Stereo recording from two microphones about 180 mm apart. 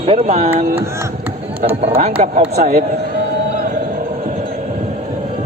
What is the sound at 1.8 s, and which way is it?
Speech, 35° right (ahead or behind).